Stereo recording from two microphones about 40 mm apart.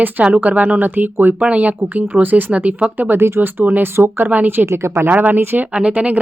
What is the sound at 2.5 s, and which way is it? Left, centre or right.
Speech, right.